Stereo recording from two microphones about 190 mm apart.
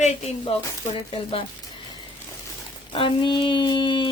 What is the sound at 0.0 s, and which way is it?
Speech, 35° left (ahead or behind).